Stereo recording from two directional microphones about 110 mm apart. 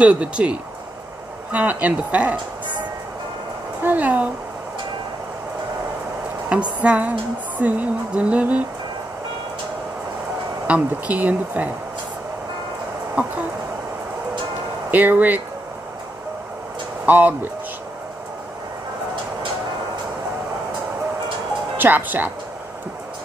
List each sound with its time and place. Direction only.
0.0 s music: 10° right (ahead or behind)
3.8 s a sound: 15° right (ahead or behind)
6.8 s music: 10° right (ahead or behind)
10.7 s music: 15° right (ahead or behind)
13.2 s music: 15° right (ahead or behind)
14.9 s music: 15° right (ahead or behind)
17.0 s speech: 15° right (ahead or behind)
21.7 s music: 15° right (ahead or behind)